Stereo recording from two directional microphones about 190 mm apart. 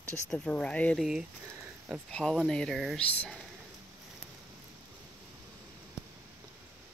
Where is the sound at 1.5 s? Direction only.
10° right (ahead or behind).